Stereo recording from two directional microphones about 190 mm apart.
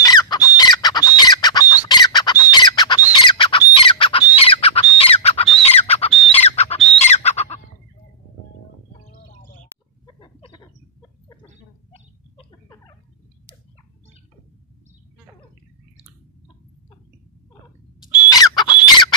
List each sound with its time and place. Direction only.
0.0 s chicken: 20° left (ahead or behind)
0.6 s squawk: 20° left (ahead or behind)
6.3 s bird: 35° left (ahead or behind)
10.2 s a sound: 25° left (ahead or behind)
18.3 s chicken: 20° left (ahead or behind)
18.9 s fowl: 20° left (ahead or behind)